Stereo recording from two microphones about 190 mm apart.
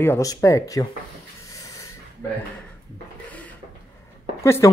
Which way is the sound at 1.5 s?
15° left (ahead or behind).